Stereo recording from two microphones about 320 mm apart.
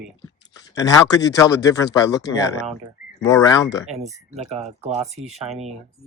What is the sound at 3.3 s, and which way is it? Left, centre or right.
Speech, centre.